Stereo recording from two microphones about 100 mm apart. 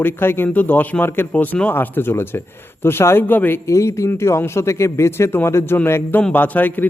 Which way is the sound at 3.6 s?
30° left (ahead or behind).